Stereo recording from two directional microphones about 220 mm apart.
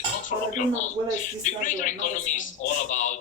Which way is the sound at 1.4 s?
35° left (ahead or behind).